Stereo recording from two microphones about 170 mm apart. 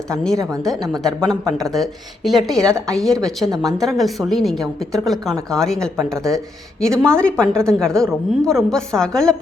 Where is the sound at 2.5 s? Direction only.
20° right (ahead or behind).